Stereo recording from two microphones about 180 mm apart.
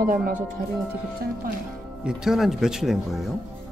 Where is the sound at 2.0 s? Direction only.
5° right (ahead or behind).